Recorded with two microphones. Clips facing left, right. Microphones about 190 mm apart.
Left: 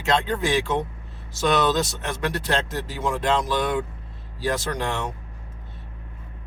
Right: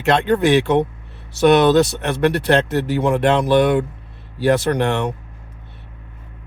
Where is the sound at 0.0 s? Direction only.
65° right (ahead or behind).